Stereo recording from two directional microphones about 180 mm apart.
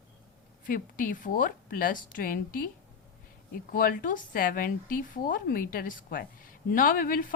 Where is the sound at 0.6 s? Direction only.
50° left (ahead or behind).